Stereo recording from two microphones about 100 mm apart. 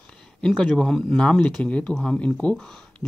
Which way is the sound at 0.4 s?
5° left (ahead or behind).